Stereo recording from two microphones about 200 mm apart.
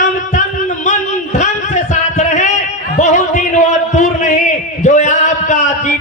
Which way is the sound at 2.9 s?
35° left (ahead or behind).